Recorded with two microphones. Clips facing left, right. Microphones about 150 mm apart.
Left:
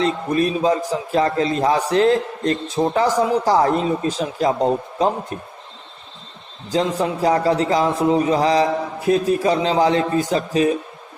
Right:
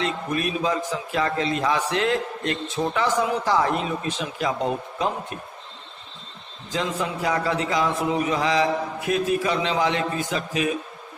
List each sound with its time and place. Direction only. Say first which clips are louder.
0.0 s a man's voice: left 7 dB; 35° left (ahead or behind)
6.7 s a man's voice: left 7 dB; 35° left (ahead or behind)